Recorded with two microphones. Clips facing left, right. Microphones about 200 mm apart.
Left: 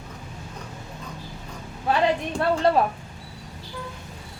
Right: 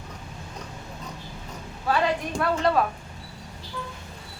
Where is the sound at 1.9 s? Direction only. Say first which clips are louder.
Left 2 dB; 25° left (ahead or behind).